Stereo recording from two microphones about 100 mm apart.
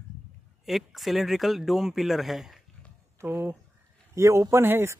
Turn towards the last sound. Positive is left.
turn(degrees=-25)  # may be behind; listen again after turning